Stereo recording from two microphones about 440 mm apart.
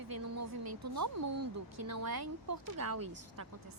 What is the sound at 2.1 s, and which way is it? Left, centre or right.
Speech, right.